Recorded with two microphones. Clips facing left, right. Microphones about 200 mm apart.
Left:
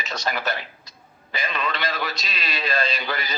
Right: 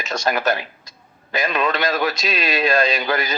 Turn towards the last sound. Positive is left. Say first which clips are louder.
# right 7 dB
turn(degrees=-45)  # may be behind; listen again after turning